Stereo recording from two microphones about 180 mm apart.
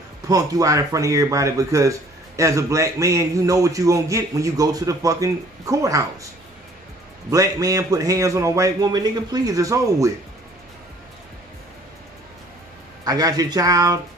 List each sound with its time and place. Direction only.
0.3 s speech: 20° right (ahead or behind)
7.2 s a man's voice: 20° right (ahead or behind)
13.0 s a man's voice: 20° right (ahead or behind)